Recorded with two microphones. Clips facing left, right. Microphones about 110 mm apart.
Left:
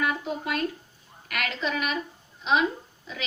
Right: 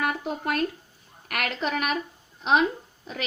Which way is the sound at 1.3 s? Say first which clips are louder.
Right 2 dB; 45° right (ahead or behind).